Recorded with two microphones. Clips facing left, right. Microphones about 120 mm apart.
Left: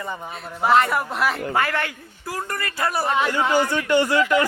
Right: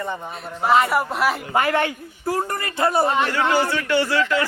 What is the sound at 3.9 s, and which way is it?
Speech, 15° left (ahead or behind).